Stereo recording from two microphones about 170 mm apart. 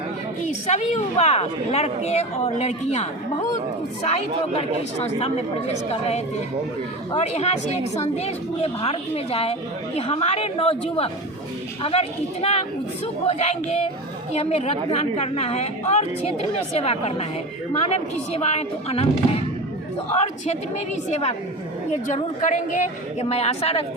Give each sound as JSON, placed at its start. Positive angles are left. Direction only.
{"t": 0.4, "sound": "a woman's voice", "side_deg": 40}
{"t": 20.1, "sound": "a woman's voice", "side_deg": 40}